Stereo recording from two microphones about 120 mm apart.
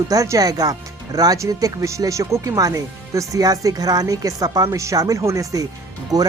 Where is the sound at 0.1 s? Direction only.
30° right (ahead or behind).